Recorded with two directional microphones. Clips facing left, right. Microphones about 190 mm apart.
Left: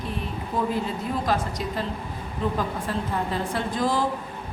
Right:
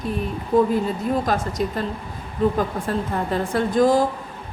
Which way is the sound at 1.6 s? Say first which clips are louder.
Right 7 dB; 50° right (ahead or behind).